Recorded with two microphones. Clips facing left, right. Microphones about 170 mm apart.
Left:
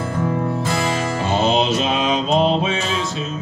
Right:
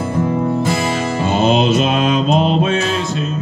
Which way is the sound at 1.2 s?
55° right (ahead or behind).